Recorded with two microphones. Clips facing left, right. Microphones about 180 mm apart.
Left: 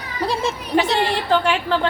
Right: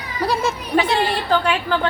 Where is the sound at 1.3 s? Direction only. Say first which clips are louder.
Left 1 dB; 25° left (ahead or behind).